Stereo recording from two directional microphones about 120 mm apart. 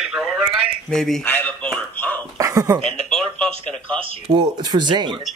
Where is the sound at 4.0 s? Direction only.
50° right (ahead or behind).